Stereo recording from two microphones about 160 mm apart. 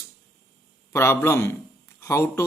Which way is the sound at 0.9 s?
15° left (ahead or behind).